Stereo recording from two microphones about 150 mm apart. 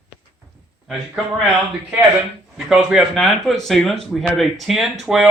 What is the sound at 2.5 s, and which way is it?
Speech, 5° right (ahead or behind).